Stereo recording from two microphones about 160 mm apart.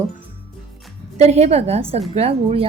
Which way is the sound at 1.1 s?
40° right (ahead or behind).